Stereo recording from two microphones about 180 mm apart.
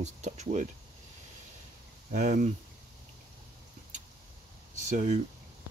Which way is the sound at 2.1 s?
45° right (ahead or behind).